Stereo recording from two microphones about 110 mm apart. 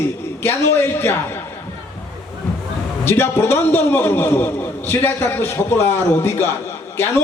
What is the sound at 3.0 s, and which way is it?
A man's voice, 20° left (ahead or behind).